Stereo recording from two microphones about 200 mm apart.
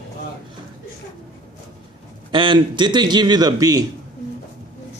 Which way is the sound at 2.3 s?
25° right (ahead or behind).